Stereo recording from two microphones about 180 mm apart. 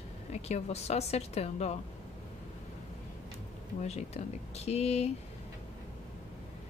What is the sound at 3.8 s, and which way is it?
A woman's voice, 35° left (ahead or behind).